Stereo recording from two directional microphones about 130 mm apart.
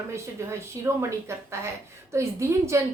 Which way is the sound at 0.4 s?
20° right (ahead or behind).